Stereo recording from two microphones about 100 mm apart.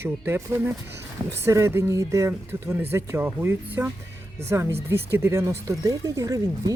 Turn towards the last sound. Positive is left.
turn(degrees=-35)  # may be behind; listen again after turning